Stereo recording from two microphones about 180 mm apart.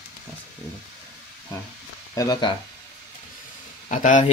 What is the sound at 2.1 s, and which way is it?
Speech, 20° left (ahead or behind).